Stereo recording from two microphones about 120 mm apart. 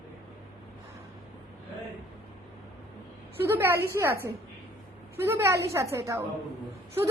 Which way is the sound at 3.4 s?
20° right (ahead or behind).